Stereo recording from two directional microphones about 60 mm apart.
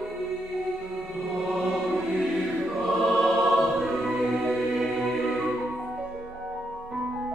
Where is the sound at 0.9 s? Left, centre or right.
Centre.